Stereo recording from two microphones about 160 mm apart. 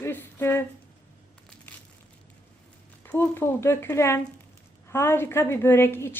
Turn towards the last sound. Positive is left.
turn(degrees=15)  # may be behind; listen again after turning